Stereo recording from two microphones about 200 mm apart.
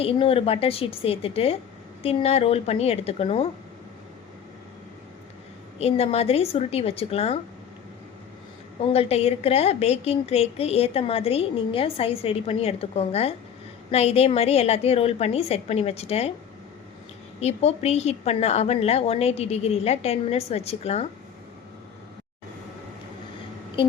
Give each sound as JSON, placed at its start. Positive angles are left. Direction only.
{"t": 0.0, "sound": "a woman's voice", "side_deg": 30}
{"t": 5.8, "sound": "a woman's voice", "side_deg": 30}
{"t": 8.8, "sound": "a woman's voice", "side_deg": 30}
{"t": 17.4, "sound": "a woman's voice", "side_deg": 30}